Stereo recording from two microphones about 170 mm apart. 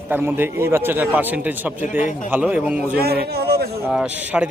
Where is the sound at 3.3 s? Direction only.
70° right (ahead or behind).